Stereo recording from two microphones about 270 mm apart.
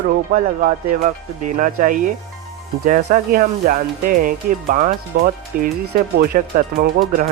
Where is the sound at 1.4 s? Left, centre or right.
Right.